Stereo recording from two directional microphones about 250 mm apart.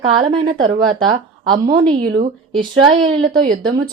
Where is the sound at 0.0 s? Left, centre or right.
Right.